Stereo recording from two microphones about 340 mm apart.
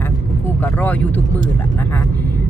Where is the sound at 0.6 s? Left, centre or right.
Centre.